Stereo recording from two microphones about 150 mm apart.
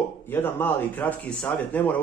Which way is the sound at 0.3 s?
15° left (ahead or behind).